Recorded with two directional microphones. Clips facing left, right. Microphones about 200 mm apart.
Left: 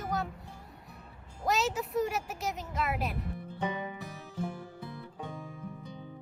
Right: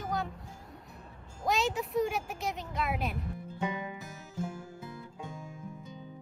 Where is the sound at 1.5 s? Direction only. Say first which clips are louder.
Even; centre (ahead or behind).